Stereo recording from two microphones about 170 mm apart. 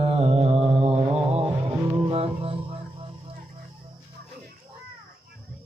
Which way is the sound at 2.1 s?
35° right (ahead or behind).